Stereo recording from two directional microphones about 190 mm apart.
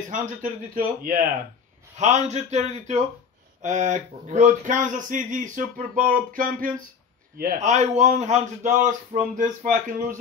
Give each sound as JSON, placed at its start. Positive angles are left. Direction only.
{"t": 0.1, "sound": "a man's voice", "side_deg": -45}